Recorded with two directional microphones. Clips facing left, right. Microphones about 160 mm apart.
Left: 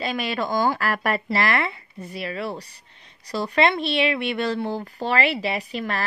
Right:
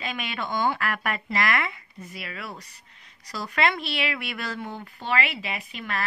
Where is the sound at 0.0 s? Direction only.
35° left (ahead or behind).